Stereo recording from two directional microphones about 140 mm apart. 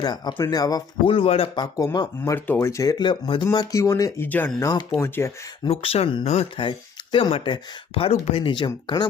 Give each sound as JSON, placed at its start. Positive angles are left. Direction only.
{"t": 0.0, "sound": "speech", "side_deg": 30}
{"t": 1.0, "sound": "speech", "side_deg": 40}
{"t": 1.6, "sound": "speech", "side_deg": 25}
{"t": 4.7, "sound": "speech", "side_deg": 35}
{"t": 4.9, "sound": "speech", "side_deg": 20}
{"t": 5.6, "sound": "speech", "side_deg": 45}